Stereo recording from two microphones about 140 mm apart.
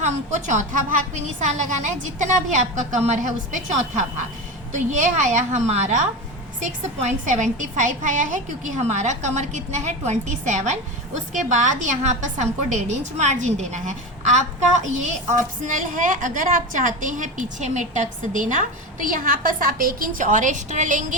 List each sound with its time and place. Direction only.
0.0 s a woman's voice: 60° right (ahead or behind)